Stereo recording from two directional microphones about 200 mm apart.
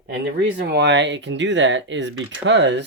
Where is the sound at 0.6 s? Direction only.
55° right (ahead or behind).